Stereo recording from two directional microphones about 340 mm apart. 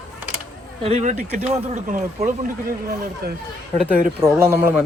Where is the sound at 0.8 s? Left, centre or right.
Centre.